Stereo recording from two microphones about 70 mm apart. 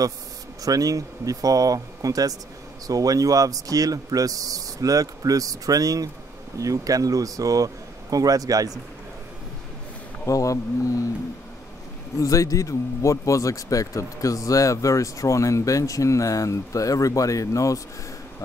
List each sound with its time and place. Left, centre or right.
0.6 s speech: right
10.2 s speech: left
12.2 s speech: left